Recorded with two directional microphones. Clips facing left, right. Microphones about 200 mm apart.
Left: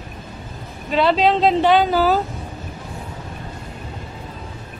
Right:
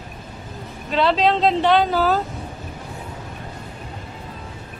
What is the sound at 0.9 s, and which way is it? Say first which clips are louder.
Speech: left 2 dB; centre (ahead or behind).